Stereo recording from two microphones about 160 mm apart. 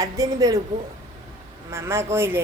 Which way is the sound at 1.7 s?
15° right (ahead or behind).